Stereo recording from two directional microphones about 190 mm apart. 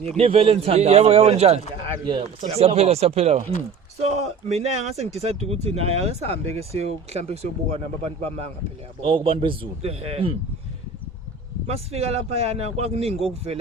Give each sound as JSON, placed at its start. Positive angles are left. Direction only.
{"t": 0.0, "sound": "a man's voice", "side_deg": -35}
{"t": 11.6, "sound": "speech", "side_deg": -35}